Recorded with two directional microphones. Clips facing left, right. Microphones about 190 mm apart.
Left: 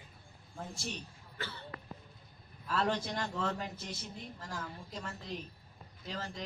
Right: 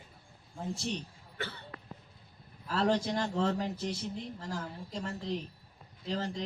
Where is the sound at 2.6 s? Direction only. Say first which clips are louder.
Right 4 dB; 35° right (ahead or behind).